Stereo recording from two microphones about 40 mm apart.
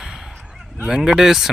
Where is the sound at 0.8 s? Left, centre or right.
Centre.